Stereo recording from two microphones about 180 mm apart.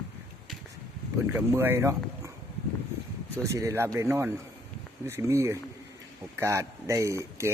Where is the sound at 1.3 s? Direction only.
15° right (ahead or behind).